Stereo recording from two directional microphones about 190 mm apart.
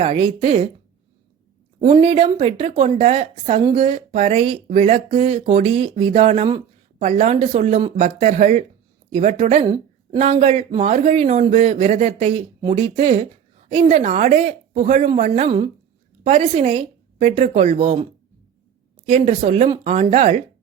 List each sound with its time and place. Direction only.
0.0 s speech: 30° right (ahead or behind)
1.8 s speech: 30° right (ahead or behind)
9.6 s a sound: 20° right (ahead or behind)
10.2 s speech: 35° right (ahead or behind)
19.0 s speech: 35° right (ahead or behind)